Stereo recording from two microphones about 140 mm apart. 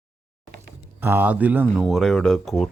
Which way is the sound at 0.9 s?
15° right (ahead or behind).